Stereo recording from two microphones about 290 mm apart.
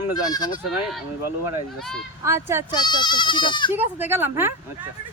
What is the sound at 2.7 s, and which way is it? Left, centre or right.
Speech, centre.